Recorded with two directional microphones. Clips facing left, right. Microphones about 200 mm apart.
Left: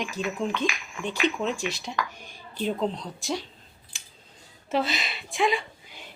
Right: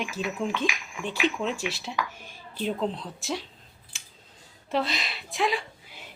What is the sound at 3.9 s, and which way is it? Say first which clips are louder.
Scissors: even; centre (ahead or behind).